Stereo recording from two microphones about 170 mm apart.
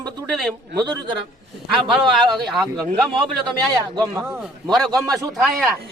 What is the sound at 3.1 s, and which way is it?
Speech, 25° right (ahead or behind).